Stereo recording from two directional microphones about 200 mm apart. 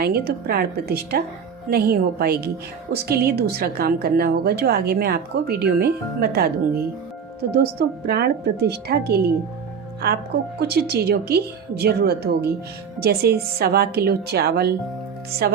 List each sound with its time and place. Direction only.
0.0 s a woman's voice: 50° right (ahead or behind)